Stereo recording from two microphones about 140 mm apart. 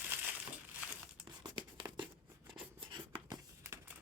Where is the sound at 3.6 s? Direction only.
15° right (ahead or behind).